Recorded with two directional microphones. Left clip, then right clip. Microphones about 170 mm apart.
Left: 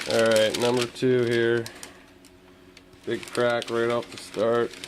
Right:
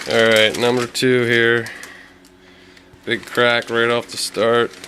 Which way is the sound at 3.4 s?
20° right (ahead or behind).